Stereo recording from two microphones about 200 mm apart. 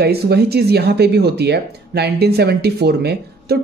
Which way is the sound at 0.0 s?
55° right (ahead or behind).